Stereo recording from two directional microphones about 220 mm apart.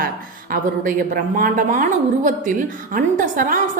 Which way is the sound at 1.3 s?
35° right (ahead or behind).